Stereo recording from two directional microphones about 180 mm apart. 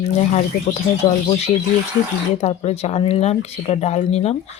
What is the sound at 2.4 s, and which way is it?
Speech, 35° left (ahead or behind).